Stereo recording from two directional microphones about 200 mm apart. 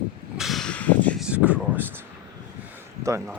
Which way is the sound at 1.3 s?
5° right (ahead or behind).